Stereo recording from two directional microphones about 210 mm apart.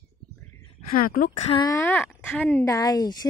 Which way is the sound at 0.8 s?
40° left (ahead or behind).